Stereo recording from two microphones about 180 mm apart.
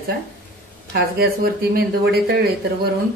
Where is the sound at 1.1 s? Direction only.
60° right (ahead or behind).